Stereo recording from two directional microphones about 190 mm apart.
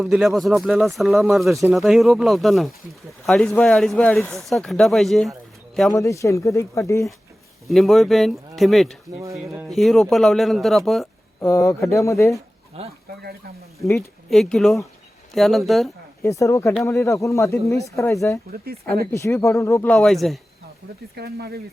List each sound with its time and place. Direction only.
0.0 s speech: centre (ahead or behind)
5.9 s speech: 15° left (ahead or behind)
7.7 s speech: centre (ahead or behind)
9.2 s speech: 15° right (ahead or behind)
9.6 s speech: centre (ahead or behind)
11.3 s speech: 15° left (ahead or behind)
12.7 s speech: 35° right (ahead or behind)
13.7 s speech: 15° left (ahead or behind)
14.3 s speech: centre (ahead or behind)
16.2 s speech: 15° left (ahead or behind); by 20.4 s centre (ahead or behind)
21.2 s speech: 55° right (ahead or behind)